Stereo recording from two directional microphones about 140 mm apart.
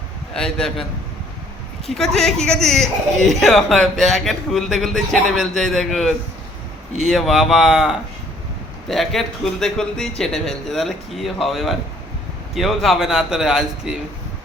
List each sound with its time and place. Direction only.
0.3 s speech: 5° left (ahead or behind)
2.0 s speech: 5° left (ahead or behind)